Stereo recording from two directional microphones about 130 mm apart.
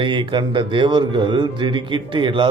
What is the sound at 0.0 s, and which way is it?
A man's voice, 40° right (ahead or behind).